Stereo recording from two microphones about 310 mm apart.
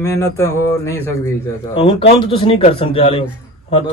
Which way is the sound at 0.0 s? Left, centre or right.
Centre.